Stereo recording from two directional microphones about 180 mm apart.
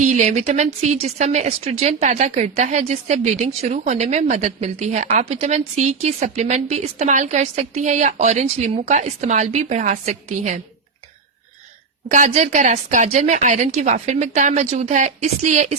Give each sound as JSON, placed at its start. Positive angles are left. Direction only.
{"t": 0.0, "sound": "speech", "side_deg": -40}
{"t": 12.1, "sound": "speech", "side_deg": -40}